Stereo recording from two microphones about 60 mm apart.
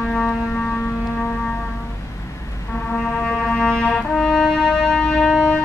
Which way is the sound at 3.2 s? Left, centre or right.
Centre.